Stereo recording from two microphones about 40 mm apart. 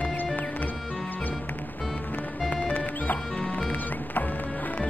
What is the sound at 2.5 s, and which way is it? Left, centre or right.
Music, left.